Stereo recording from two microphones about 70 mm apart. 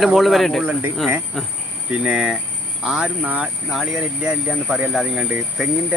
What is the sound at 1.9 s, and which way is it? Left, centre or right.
Speech, centre.